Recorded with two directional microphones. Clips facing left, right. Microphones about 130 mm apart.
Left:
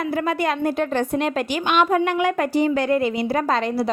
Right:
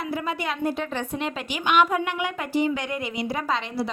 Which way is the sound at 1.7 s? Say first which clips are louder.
Left 3 dB; 35° left (ahead or behind).